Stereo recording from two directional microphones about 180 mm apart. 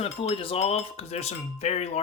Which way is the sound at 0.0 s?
30° left (ahead or behind).